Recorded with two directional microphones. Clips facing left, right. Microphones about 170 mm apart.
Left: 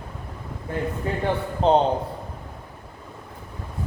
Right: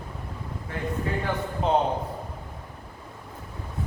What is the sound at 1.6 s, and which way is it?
Speech, 30° left (ahead or behind).